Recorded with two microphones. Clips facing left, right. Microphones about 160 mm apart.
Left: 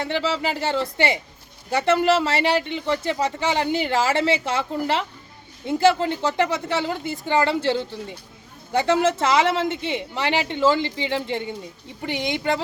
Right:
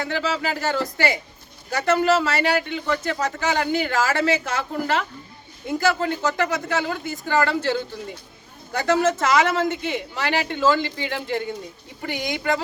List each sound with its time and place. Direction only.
0.0 s speech: 25° left (ahead or behind)